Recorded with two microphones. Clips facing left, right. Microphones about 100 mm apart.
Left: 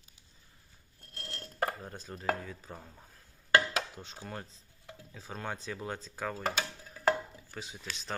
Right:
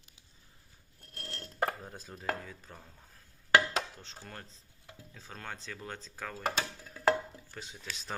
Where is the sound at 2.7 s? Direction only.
10° left (ahead or behind).